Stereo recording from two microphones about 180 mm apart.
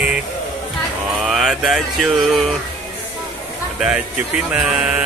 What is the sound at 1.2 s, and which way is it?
Mantra, centre (ahead or behind).